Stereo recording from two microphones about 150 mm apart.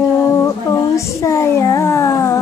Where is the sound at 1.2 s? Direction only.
20° left (ahead or behind).